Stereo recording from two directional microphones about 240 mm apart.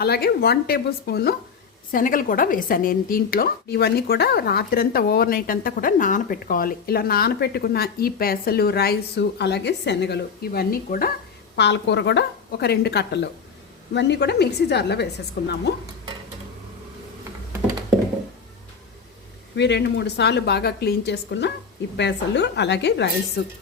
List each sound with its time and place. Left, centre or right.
0.0 s a woman's voice: left
19.5 s a woman's voice: left